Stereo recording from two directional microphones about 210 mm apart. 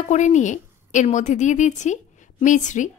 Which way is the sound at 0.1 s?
35° left (ahead or behind).